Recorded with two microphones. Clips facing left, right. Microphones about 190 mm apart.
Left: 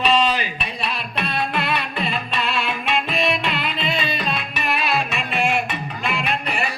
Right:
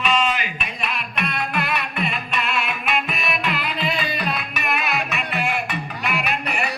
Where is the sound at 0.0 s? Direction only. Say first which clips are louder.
Left 3 dB; 35° left (ahead or behind).